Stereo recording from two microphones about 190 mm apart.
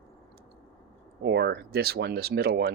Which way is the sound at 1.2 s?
65° right (ahead or behind).